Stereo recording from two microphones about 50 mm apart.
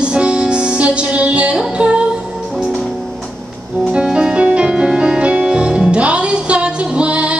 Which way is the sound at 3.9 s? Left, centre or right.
Centre.